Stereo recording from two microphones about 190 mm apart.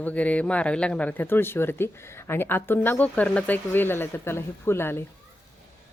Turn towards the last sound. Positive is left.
turn(degrees=10)  # may be behind; listen again after turning